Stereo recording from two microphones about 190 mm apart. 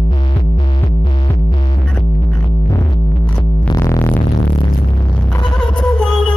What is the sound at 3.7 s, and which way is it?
Music, 15° left (ahead or behind).